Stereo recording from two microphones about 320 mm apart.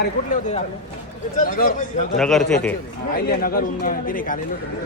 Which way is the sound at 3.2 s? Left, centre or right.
Left.